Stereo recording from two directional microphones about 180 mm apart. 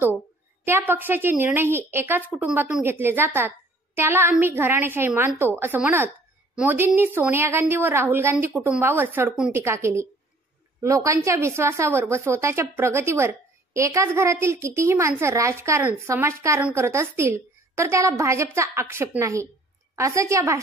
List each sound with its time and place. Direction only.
0.7 s a woman's voice: 10° right (ahead or behind)